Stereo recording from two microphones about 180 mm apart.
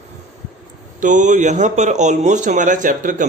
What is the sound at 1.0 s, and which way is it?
Speech, 45° right (ahead or behind).